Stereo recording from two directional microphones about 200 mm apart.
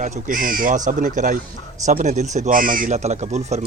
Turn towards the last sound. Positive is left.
turn(degrees=-35)  # may be behind; listen again after turning